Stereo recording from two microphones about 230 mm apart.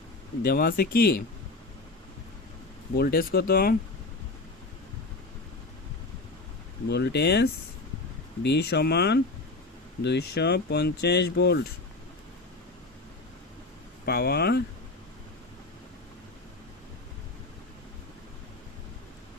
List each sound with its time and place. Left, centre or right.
0.4 s speech: left
3.0 s speech: left
6.8 s speech: left
14.0 s speech: left